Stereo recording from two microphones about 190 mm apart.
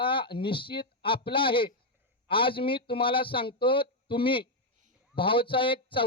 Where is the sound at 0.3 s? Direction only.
25° left (ahead or behind).